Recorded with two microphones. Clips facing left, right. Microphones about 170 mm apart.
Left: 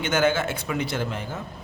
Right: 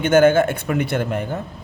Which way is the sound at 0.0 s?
50° right (ahead or behind).